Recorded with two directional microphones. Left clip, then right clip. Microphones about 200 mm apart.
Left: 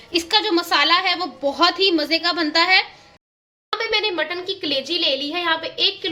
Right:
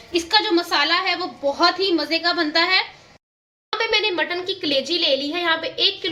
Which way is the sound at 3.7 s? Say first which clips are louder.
Right 1 dB; 5° left (ahead or behind).